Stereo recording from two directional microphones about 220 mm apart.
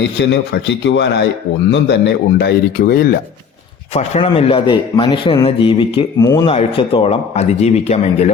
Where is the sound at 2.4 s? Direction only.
45° left (ahead or behind).